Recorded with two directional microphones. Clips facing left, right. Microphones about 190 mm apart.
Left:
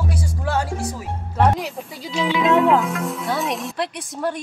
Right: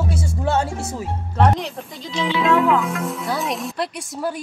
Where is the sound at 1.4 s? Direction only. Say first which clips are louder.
Even; 5° left (ahead or behind).